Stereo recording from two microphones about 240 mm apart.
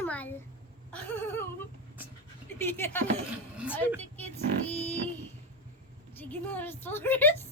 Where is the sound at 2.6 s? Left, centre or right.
Centre.